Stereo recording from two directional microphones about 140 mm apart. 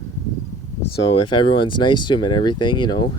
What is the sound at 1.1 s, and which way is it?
Speech, 35° left (ahead or behind).